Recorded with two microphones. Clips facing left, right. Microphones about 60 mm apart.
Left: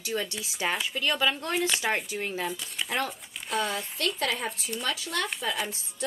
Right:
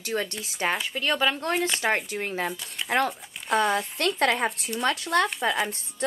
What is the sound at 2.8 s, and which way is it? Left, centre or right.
Speech, right.